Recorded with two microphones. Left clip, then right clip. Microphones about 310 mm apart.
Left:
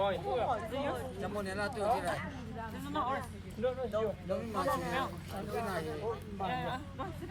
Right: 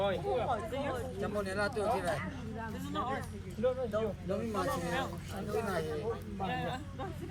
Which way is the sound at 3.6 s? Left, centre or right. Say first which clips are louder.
Right 1 dB; left.